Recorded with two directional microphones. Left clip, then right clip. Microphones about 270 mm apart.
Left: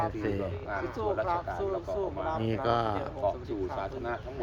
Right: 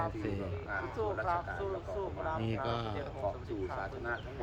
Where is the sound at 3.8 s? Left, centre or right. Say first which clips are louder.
Left 4 dB; left.